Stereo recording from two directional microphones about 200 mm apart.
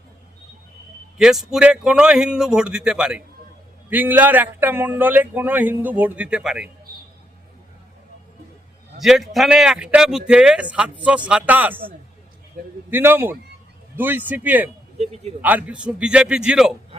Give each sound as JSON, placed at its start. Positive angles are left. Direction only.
{"t": 1.2, "sound": "a man's voice", "side_deg": 0}
{"t": 9.0, "sound": "a man's voice", "side_deg": 0}
{"t": 14.9, "sound": "speech", "side_deg": -35}
{"t": 15.4, "sound": "a man's voice", "side_deg": -10}